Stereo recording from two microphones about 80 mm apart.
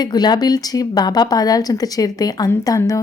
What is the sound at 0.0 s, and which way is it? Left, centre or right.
A woman's voice, left.